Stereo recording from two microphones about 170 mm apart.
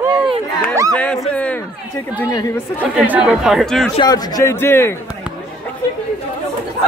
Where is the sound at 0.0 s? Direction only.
25° right (ahead or behind).